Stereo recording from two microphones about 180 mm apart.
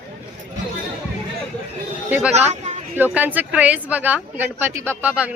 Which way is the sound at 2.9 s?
10° right (ahead or behind).